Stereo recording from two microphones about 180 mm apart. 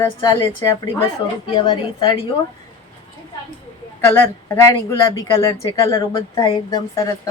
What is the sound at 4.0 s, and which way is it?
Speech, 10° left (ahead or behind).